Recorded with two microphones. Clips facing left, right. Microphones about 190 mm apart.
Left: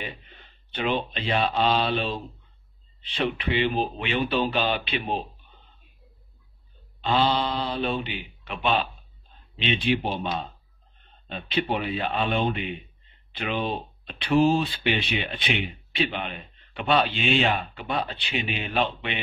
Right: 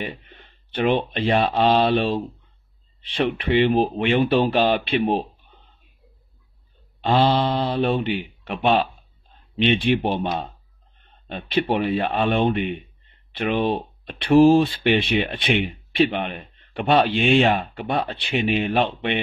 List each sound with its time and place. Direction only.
1.1 s speech: 50° right (ahead or behind)
3.1 s speech: 50° right (ahead or behind)
7.1 s speech: 50° right (ahead or behind)
10.1 s speech: 60° right (ahead or behind)